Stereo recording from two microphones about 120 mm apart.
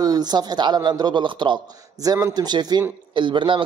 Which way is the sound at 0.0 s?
35° right (ahead or behind).